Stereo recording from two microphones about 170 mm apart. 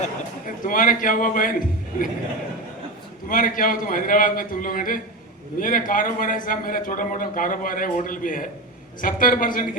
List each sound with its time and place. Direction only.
0.4 s a man's voice: 55° left (ahead or behind)
3.2 s a man's voice: 55° left (ahead or behind)